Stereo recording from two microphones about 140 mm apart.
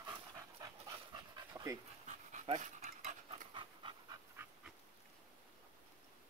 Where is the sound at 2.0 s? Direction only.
60° right (ahead or behind).